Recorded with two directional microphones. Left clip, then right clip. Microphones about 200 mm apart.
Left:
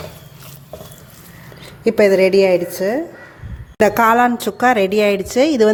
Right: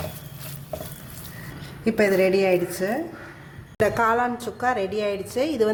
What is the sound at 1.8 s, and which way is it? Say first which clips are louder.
A woman's voice: left 8 dB; 35° left (ahead or behind).